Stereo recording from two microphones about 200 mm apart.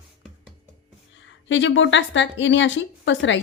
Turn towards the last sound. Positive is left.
turn(degrees=70)  # may be behind; listen again after turning